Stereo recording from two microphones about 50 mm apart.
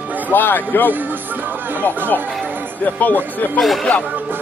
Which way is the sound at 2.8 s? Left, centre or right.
Left.